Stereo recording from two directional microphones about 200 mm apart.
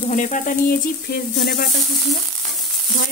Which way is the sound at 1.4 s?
50° left (ahead or behind).